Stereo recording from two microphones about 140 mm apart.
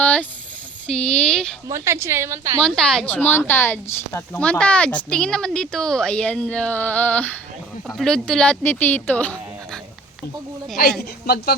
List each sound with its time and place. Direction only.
0.0 s a sound: 10° left (ahead or behind)
0.9 s speech: 5° left (ahead or behind)
1.6 s a woman's voice: 20° right (ahead or behind)
2.6 s speech: 5° left (ahead or behind)